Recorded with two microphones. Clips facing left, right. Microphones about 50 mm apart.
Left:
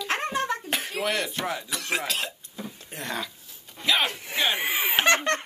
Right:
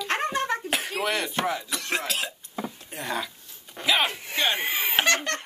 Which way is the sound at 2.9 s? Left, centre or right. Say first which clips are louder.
Right 1 dB; centre.